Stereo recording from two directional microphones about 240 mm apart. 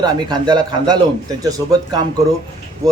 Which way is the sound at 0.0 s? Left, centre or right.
Centre.